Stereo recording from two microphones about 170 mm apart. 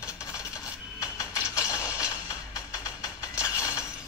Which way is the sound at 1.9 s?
20° left (ahead or behind).